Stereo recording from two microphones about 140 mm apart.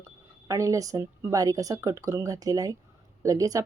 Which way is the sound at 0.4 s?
20° right (ahead or behind).